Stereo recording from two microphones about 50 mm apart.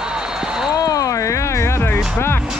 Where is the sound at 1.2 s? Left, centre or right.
Left.